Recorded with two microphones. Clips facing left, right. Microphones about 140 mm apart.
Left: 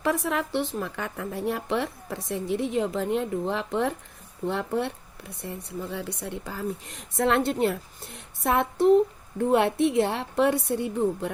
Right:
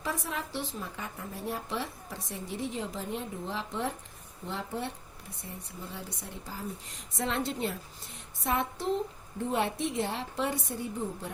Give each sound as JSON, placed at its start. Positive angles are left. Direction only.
{"t": 0.0, "sound": "a woman's voice", "side_deg": 65}